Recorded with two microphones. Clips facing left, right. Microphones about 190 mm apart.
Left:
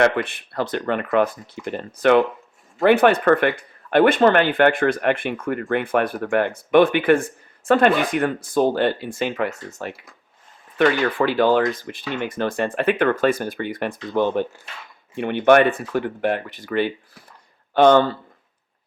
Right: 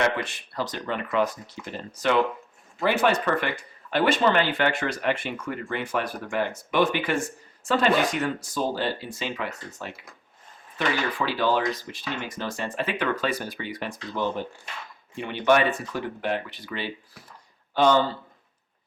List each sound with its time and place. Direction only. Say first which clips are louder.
0.0 s speech: left 7 dB; 55° left (ahead or behind)